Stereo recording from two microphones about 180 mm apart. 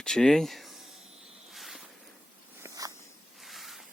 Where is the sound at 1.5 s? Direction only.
Centre (ahead or behind).